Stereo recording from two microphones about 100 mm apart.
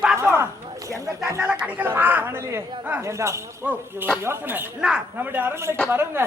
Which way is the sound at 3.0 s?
30° right (ahead or behind).